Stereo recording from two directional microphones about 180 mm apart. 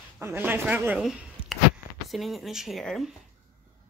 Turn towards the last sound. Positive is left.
turn(degrees=0)  # may be behind; listen again after turning